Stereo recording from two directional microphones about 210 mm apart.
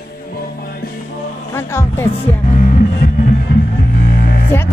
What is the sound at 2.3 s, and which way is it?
Music, 35° left (ahead or behind).